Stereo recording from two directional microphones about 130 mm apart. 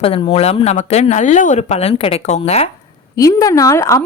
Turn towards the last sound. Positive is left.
turn(degrees=25)  # may be behind; listen again after turning